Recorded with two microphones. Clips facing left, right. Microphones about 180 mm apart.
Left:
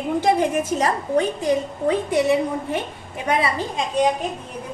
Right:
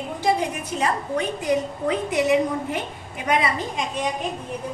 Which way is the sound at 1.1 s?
30° left (ahead or behind).